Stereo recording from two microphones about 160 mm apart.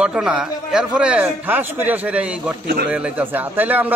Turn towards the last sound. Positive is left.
turn(degrees=-10)  # may be behind; listen again after turning